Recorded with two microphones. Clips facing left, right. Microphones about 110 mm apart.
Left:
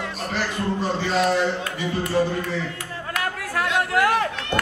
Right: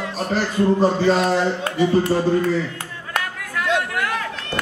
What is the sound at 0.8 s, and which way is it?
A man's voice, 40° right (ahead or behind).